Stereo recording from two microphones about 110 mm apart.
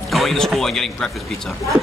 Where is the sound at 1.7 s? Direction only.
50° right (ahead or behind).